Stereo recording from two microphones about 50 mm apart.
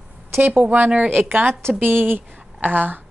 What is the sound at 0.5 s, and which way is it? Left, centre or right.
Speech, right.